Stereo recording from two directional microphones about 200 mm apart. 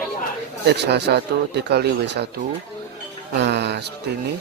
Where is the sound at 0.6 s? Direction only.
55° right (ahead or behind).